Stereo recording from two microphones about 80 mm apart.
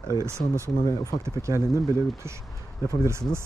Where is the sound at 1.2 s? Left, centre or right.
Right.